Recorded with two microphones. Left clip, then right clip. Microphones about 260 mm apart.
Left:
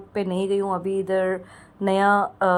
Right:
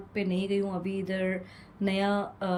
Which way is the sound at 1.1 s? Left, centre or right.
Left.